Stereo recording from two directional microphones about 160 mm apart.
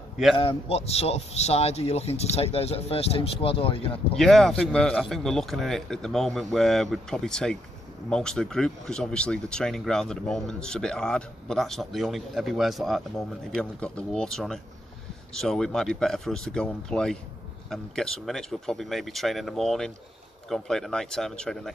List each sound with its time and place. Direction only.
0.4 s speech: 40° left (ahead or behind)
4.2 s speech: centre (ahead or behind)